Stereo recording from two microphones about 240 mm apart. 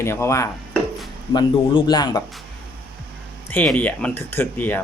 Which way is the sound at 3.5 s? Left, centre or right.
Centre.